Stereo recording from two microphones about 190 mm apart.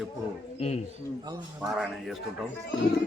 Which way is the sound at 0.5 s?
35° left (ahead or behind).